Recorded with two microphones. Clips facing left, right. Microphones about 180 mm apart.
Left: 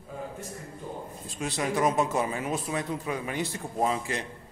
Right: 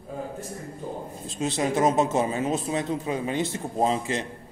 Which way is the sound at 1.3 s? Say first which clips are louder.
Right 4 dB; 25° right (ahead or behind).